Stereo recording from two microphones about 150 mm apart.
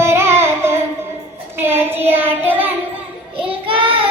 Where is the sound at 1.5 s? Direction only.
15° right (ahead or behind).